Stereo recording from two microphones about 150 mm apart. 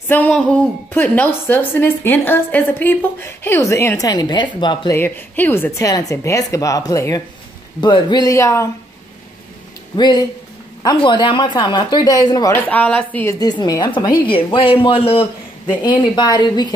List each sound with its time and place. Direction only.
0.1 s a woman's voice: 10° left (ahead or behind); by 4.9 s 30° left (ahead or behind)
4.9 s speech: 15° left (ahead or behind)
9.9 s speech: 30° left (ahead or behind)
15.8 s speech: 30° left (ahead or behind)